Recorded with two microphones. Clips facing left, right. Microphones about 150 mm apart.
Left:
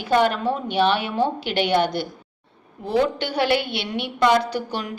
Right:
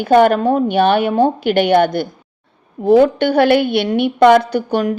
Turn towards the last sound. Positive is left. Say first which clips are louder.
# right 10 dB
turn(degrees=-50)  # may be behind; listen again after turning